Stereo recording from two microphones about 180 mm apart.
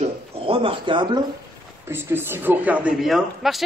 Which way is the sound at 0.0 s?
30° right (ahead or behind).